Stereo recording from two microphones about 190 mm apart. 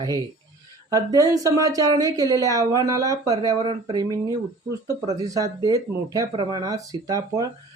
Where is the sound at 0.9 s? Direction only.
20° right (ahead or behind).